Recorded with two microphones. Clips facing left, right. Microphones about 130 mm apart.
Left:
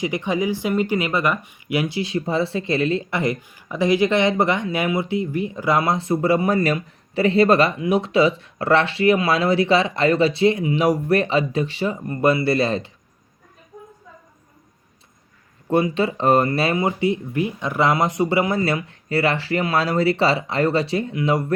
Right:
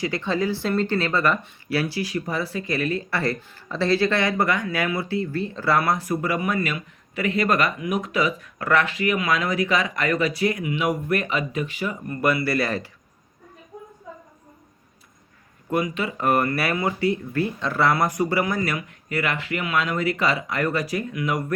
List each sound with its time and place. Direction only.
0.0 s speech: 15° left (ahead or behind)
15.7 s speech: 30° left (ahead or behind)